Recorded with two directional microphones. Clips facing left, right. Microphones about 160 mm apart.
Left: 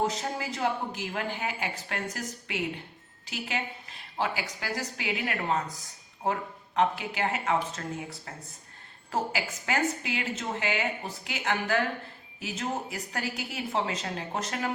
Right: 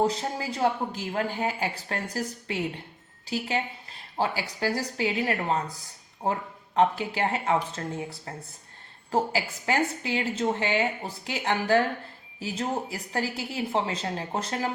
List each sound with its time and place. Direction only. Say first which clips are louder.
0.1 s a woman's voice: right 2 dB; 30° right (ahead or behind)